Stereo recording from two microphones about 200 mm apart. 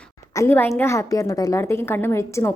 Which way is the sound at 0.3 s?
10° left (ahead or behind).